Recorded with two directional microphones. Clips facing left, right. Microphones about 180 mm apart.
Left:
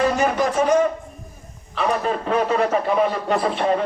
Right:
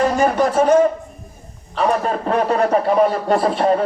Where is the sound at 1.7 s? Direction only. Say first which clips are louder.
Right 3 dB; 40° right (ahead or behind).